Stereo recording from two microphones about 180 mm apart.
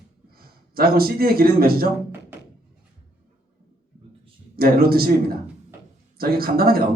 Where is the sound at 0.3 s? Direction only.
55° right (ahead or behind).